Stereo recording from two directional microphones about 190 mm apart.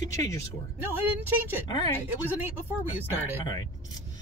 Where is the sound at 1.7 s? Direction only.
20° left (ahead or behind).